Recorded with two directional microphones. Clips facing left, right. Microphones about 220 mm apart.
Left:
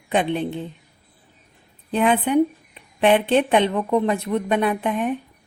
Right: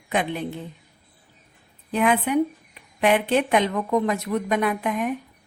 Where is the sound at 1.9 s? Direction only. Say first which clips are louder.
Left 2 dB; 30° left (ahead or behind).